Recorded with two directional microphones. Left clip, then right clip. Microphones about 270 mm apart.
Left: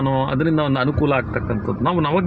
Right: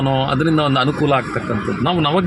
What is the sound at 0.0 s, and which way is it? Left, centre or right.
A man's voice, centre.